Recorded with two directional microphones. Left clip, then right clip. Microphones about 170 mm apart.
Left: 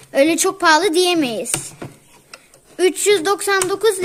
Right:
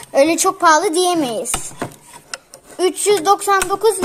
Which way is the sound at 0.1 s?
40° left (ahead or behind).